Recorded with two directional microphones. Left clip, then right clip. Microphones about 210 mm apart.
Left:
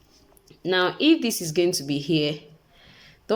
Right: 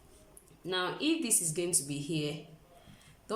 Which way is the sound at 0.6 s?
40° left (ahead or behind).